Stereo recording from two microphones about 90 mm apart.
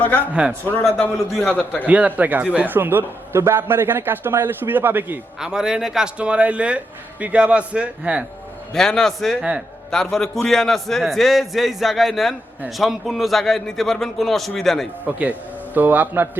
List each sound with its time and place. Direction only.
0.8 s a man's voice: 5° left (ahead or behind)
1.9 s a man's voice: 15° right (ahead or behind)
5.4 s speech: 5° right (ahead or behind)
8.7 s a man's voice: 5° left (ahead or behind)
15.0 s a man's voice: 20° right (ahead or behind)